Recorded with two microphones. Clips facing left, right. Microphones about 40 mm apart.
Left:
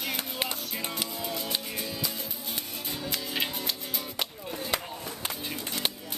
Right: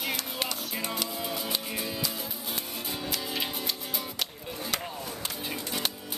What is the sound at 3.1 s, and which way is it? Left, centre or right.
Music, centre.